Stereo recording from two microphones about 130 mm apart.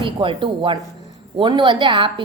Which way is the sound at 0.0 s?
40° right (ahead or behind).